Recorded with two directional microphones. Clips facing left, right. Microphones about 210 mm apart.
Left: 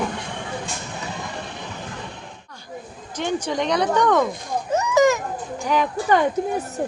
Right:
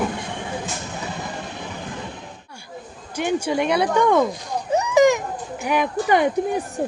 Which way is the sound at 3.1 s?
10° right (ahead or behind).